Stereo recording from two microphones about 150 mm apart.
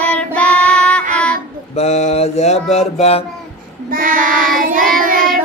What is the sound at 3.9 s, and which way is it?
Child singing, 65° right (ahead or behind).